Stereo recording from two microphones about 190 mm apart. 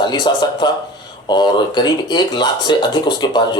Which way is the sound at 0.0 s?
25° left (ahead or behind).